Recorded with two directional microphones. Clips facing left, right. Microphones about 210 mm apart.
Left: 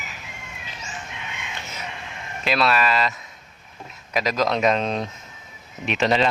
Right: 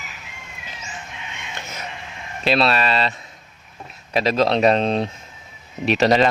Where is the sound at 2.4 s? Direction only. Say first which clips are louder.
Right 2 dB; 30° right (ahead or behind).